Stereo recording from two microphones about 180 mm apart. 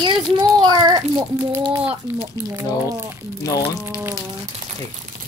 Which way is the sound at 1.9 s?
10° right (ahead or behind).